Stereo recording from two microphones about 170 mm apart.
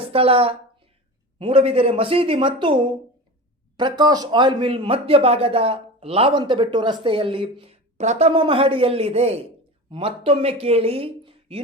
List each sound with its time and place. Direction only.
0.0 s a woman's voice: 35° right (ahead or behind)